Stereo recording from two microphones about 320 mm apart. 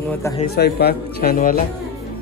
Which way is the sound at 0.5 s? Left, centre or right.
Left.